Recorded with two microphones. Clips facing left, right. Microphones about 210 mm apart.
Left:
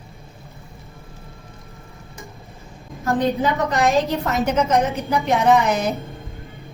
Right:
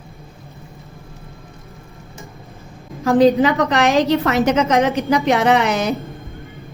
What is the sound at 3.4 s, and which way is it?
A woman's voice, 80° right.